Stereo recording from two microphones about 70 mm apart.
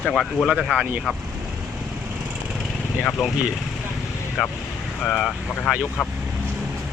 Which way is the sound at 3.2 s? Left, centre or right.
Centre.